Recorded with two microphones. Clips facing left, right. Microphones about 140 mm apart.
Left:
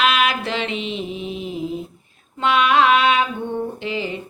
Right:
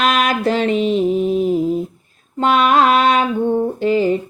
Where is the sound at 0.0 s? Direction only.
40° right (ahead or behind).